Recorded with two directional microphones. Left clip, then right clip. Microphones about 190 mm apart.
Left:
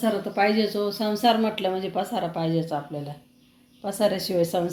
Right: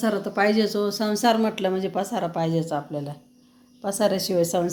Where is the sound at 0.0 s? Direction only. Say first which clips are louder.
Even; 15° right (ahead or behind).